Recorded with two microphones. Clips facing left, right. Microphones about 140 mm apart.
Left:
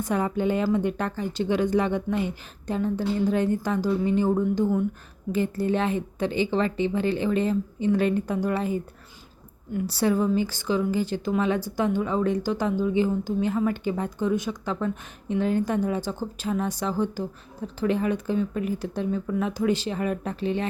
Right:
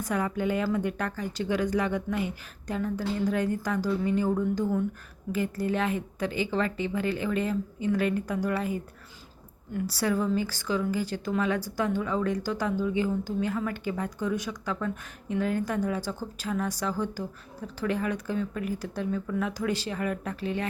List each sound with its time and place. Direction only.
0.0 s speech: 25° left (ahead or behind)